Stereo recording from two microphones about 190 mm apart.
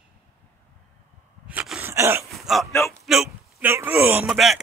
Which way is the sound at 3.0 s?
Centre (ahead or behind).